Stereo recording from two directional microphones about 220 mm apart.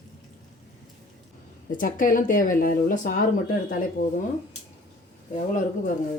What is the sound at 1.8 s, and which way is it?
Speech, 40° left (ahead or behind).